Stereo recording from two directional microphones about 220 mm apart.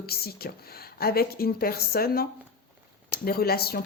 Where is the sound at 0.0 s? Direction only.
45° left (ahead or behind).